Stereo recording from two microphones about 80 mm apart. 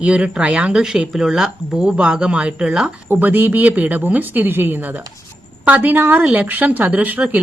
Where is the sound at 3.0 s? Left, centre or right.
Right.